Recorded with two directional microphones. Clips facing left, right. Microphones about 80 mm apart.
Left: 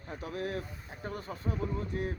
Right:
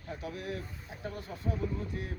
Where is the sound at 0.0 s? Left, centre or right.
Left.